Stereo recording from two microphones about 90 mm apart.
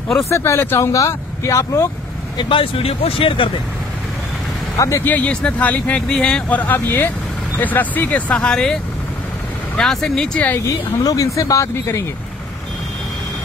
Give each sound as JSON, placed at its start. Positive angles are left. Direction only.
{"t": 0.3, "sound": "speech", "side_deg": 30}
{"t": 2.5, "sound": "speech", "side_deg": 90}
{"t": 4.7, "sound": "speech", "side_deg": 35}
{"t": 5.0, "sound": "speech", "side_deg": 15}
{"t": 6.7, "sound": "speech", "side_deg": 20}
{"t": 9.8, "sound": "speech", "side_deg": 10}
{"t": 10.7, "sound": "speech", "side_deg": 40}